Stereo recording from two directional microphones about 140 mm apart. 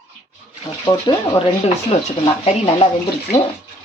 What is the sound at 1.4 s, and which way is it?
Speech, 45° left (ahead or behind).